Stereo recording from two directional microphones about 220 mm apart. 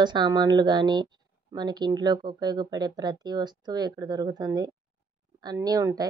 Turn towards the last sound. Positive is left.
turn(degrees=-15)  # may be behind; listen again after turning